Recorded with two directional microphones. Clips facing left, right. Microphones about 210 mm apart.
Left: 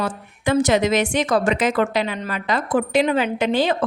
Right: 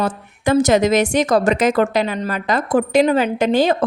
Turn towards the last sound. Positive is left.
turn(degrees=-45)  # may be behind; listen again after turning